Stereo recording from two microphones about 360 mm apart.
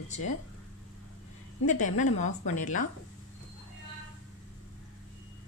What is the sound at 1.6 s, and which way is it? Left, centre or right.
A woman's voice, left.